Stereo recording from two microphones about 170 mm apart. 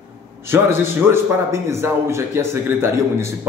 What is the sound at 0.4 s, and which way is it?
A man's voice, 15° right (ahead or behind).